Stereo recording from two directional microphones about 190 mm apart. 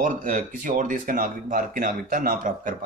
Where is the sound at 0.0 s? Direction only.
45° right (ahead or behind).